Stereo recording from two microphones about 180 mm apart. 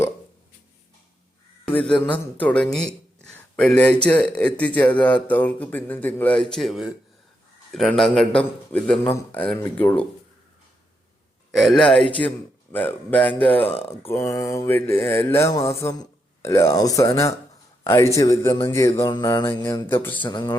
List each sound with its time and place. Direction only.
1.6 s a man's voice: 5° left (ahead or behind)
11.5 s a man's voice: centre (ahead or behind)
20.2 s speech: 25° left (ahead or behind)